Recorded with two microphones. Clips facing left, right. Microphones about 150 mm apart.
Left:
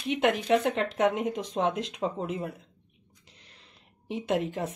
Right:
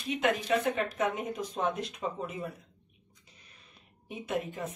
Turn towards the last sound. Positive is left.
turn(degrees=90)